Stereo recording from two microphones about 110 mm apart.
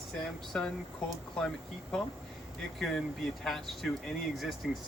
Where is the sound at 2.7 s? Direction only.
Centre (ahead or behind).